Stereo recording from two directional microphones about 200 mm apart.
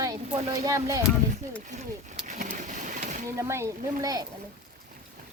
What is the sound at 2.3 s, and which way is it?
Vehicle, 35° right (ahead or behind).